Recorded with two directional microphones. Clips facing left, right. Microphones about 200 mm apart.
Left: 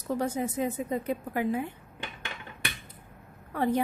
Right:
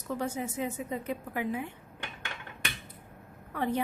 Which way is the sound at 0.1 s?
40° left (ahead or behind).